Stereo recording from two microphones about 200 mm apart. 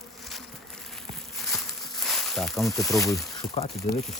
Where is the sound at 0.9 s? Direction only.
Centre (ahead or behind).